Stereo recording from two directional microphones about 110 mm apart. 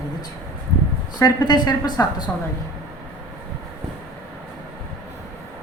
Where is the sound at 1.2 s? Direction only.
40° left (ahead or behind).